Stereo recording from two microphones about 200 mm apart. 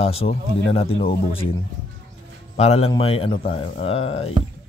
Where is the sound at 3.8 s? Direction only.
30° left (ahead or behind).